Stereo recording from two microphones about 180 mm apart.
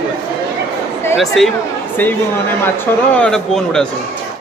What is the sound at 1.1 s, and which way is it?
Speech, centre (ahead or behind).